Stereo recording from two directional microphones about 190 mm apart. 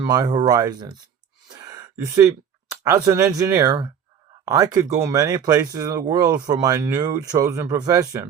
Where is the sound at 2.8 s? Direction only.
15° right (ahead or behind).